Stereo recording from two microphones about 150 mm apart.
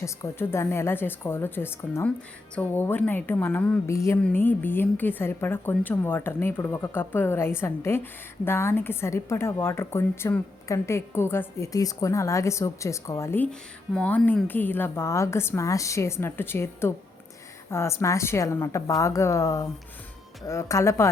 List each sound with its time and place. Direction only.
0.0 s a woman's voice: 15° left (ahead or behind)